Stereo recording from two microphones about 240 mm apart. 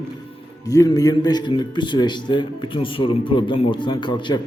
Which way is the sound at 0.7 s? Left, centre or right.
Centre.